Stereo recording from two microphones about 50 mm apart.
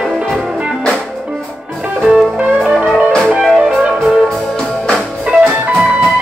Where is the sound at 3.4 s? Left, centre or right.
Centre.